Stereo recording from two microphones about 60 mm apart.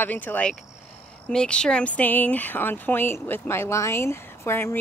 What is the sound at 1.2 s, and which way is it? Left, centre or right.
Speech, centre.